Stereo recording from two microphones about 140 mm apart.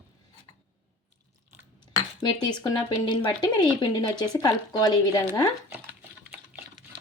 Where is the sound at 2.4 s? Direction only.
30° left (ahead or behind).